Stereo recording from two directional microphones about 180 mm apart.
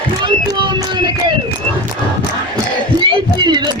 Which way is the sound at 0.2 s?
25° right (ahead or behind).